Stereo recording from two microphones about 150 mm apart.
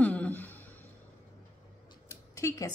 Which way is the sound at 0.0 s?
10° left (ahead or behind).